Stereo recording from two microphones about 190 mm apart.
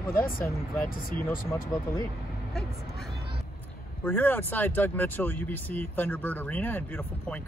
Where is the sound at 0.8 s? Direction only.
45° left (ahead or behind).